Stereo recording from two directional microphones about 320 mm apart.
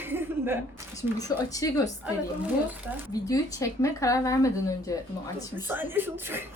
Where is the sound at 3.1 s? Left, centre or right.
Centre.